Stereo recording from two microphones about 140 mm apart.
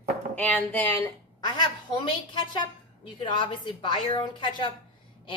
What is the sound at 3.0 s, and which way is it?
A woman's voice, 35° left (ahead or behind).